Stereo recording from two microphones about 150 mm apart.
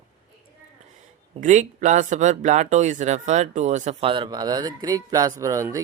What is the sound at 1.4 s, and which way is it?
Speech, 55° right (ahead or behind).